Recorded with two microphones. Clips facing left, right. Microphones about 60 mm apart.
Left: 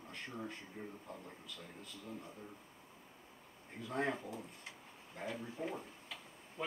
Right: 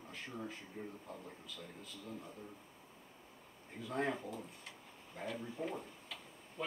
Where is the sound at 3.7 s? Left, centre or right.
Centre.